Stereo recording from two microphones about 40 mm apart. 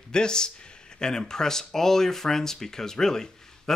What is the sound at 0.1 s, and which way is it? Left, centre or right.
Speech, centre.